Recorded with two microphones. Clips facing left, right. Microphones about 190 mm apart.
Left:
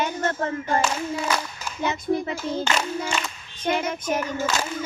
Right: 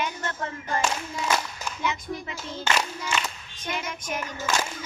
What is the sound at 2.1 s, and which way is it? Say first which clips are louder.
Speech: left 10 dB; 45° left (ahead or behind).